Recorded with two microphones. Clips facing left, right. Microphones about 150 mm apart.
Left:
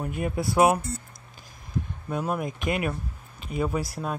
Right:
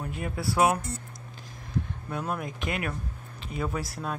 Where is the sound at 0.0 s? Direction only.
20° left (ahead or behind).